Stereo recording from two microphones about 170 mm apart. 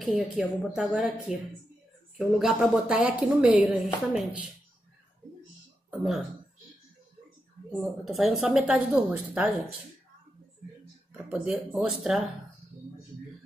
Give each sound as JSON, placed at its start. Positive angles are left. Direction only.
{"t": 0.0, "sound": "speech", "side_deg": 0}
{"t": 5.9, "sound": "speech", "side_deg": 0}
{"t": 7.7, "sound": "speech", "side_deg": 0}
{"t": 11.2, "sound": "speech", "side_deg": -5}